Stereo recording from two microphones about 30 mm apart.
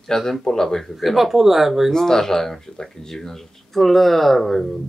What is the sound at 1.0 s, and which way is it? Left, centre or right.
Speech, centre.